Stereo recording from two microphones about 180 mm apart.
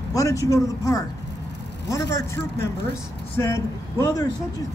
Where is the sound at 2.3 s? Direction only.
15° left (ahead or behind).